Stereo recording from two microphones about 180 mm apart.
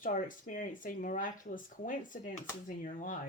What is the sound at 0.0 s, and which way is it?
Speech, 50° left (ahead or behind).